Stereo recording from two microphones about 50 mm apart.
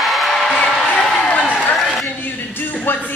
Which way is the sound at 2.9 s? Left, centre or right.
Left.